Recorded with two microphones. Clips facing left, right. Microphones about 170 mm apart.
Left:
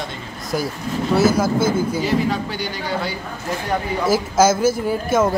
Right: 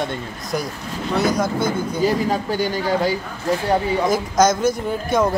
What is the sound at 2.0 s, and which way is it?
Speech, 45° right (ahead or behind).